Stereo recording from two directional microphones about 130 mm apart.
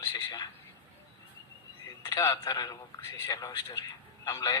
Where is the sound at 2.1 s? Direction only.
25° left (ahead or behind).